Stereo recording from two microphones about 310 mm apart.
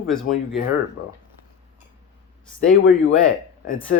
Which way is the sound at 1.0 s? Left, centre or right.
Left.